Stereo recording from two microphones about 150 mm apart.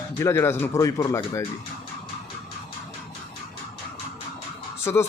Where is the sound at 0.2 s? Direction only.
20° left (ahead or behind).